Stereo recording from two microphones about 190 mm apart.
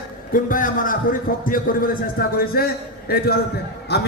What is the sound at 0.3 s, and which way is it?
A man's voice, 45° left (ahead or behind).